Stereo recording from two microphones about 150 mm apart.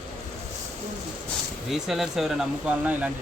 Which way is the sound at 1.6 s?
Centre (ahead or behind).